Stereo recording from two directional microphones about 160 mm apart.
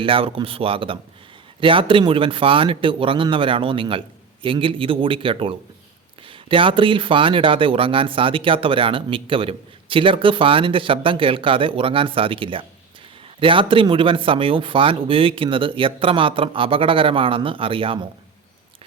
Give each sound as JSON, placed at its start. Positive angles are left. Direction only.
{"t": 0.0, "sound": "speech", "side_deg": -35}